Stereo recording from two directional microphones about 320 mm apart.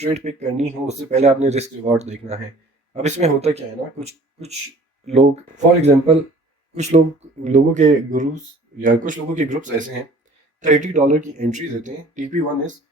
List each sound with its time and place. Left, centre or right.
0.0 s speech: centre
7.4 s speech: right